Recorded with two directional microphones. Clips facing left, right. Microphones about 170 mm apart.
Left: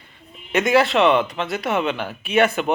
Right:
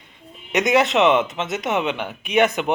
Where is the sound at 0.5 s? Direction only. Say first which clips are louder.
Left 1 dB; 20° right (ahead or behind).